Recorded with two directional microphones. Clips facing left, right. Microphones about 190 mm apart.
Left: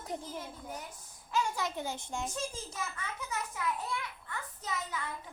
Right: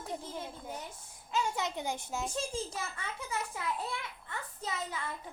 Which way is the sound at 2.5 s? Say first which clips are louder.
Right 3 dB; 30° right (ahead or behind).